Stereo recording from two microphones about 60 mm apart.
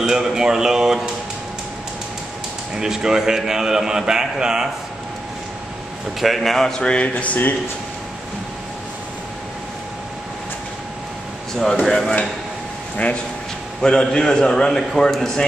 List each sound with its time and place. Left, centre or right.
0.0 s a man's voice: centre
2.7 s a man's voice: centre
6.2 s a man's voice: centre
6.8 s speech: centre
11.8 s a man's voice: centre
13.8 s a man's voice: centre